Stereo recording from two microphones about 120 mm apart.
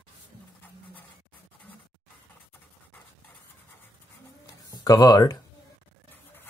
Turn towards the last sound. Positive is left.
turn(degrees=30)  # may be behind; listen again after turning